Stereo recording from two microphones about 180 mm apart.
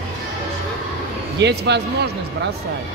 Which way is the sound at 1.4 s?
70° right (ahead or behind).